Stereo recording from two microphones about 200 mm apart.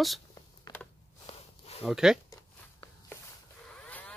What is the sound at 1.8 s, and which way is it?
Speech, 5° right (ahead or behind).